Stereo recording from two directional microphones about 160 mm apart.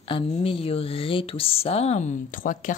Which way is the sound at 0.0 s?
35° left (ahead or behind).